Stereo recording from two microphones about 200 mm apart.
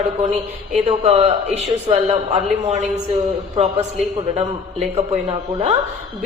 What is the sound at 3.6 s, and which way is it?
Speech, 30° right (ahead or behind).